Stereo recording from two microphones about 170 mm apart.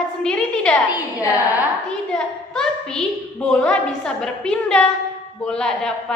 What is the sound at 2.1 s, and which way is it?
A child's voice, 5° left (ahead or behind).